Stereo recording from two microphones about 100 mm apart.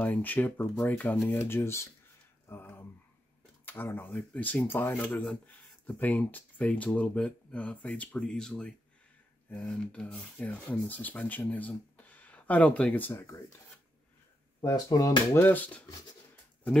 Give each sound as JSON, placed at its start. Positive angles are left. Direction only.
{"t": 0.0, "sound": "speech", "side_deg": 15}
{"t": 2.4, "sound": "a sound", "side_deg": 20}
{"t": 3.6, "sound": "speech", "side_deg": 20}
{"t": 14.6, "sound": "speech", "side_deg": 35}
{"t": 15.3, "sound": "speech", "side_deg": 20}